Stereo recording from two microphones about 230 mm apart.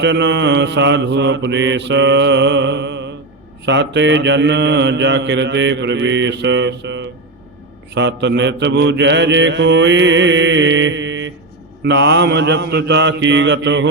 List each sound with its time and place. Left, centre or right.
0.0 s mantra: right